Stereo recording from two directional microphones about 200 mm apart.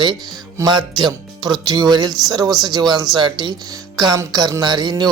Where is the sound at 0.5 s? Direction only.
20° right (ahead or behind).